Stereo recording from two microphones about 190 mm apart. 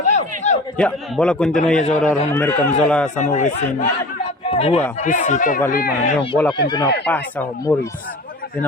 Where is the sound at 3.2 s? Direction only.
40° left (ahead or behind).